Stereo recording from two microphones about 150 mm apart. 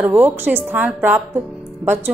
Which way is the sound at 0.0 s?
10° right (ahead or behind).